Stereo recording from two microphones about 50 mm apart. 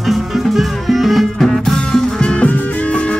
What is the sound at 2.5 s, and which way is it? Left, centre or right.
Music, left.